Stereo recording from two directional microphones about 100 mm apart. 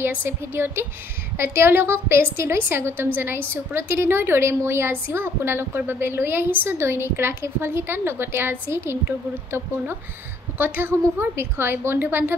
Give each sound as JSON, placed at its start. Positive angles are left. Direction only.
{"t": 0.0, "sound": "a woman's voice", "side_deg": -20}
{"t": 10.6, "sound": "a woman's voice", "side_deg": -20}